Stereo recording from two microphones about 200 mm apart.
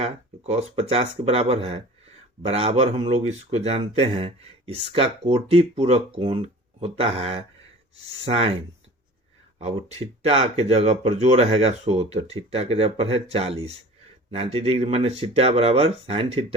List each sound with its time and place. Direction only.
0.0 s speech: 30° right (ahead or behind)
10.2 s speech: 30° right (ahead or behind)